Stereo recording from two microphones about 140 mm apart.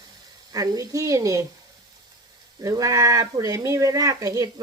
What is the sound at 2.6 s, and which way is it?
Speech, 25° right (ahead or behind).